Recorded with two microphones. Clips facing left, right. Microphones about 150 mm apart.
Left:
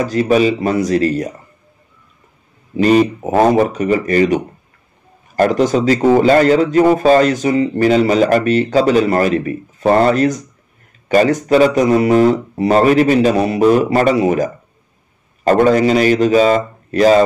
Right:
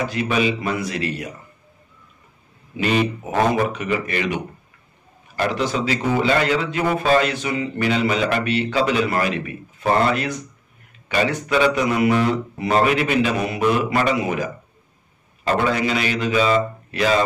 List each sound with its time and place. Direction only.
0.0 s a man's voice: 40° left (ahead or behind)
2.8 s a man's voice: 40° left (ahead or behind)